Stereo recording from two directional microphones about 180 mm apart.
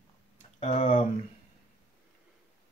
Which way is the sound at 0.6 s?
40° left (ahead or behind).